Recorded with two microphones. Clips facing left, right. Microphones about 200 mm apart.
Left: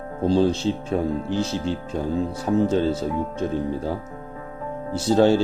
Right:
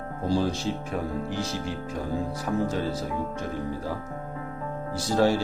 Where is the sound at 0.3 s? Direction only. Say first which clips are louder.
Left 6 dB; 25° left (ahead or behind).